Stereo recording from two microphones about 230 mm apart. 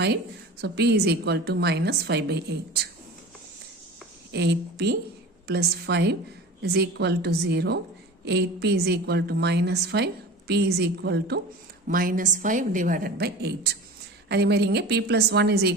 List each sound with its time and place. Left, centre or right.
0.6 s a woman's voice: right
4.3 s a woman's voice: right